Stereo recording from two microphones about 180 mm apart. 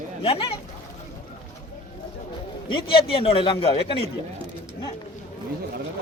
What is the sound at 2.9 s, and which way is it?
Speech, 30° left (ahead or behind).